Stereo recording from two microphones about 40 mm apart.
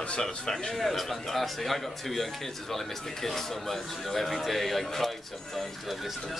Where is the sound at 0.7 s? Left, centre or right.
Centre.